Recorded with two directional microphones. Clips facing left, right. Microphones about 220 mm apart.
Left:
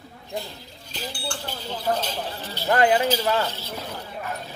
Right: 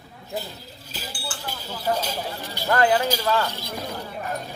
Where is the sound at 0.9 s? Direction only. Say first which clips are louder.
Left 4 dB; 5° right (ahead or behind).